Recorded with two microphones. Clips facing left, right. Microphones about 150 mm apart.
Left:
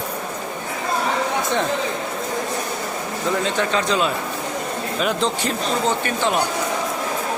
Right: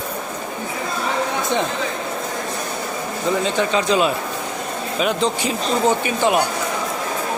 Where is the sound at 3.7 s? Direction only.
10° right (ahead or behind).